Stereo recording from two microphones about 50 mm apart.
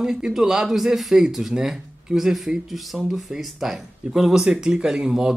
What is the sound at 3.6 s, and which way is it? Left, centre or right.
Speech, centre.